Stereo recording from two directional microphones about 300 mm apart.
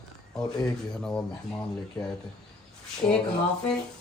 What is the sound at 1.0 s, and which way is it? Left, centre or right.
Speech, centre.